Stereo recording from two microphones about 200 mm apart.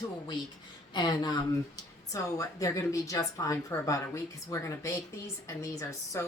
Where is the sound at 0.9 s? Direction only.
20° left (ahead or behind).